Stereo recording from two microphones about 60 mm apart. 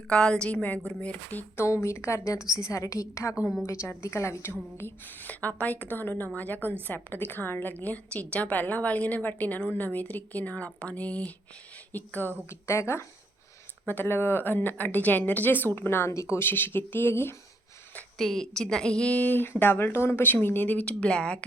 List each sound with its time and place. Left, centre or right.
0.1 s a woman's voice: centre
1.5 s a woman's voice: left
4.8 s a woman's voice: left
12.5 s a woman's voice: left
13.8 s speech: left
16.1 s a woman's voice: left
16.5 s speech: left
18.2 s a woman's voice: centre
19.1 s speech: left